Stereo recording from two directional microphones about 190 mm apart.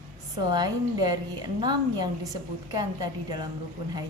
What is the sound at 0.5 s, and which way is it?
A woman's voice, 20° right (ahead or behind).